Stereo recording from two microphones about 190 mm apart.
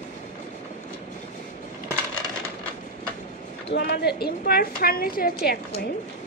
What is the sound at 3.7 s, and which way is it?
A woman's voice, 60° left (ahead or behind).